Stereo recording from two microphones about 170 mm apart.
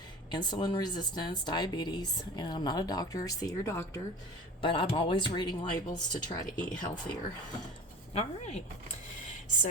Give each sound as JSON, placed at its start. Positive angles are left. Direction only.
{"t": 0.3, "sound": "speech", "side_deg": 25}
{"t": 4.6, "sound": "speech", "side_deg": 30}
{"t": 8.1, "sound": "a woman's voice", "side_deg": 40}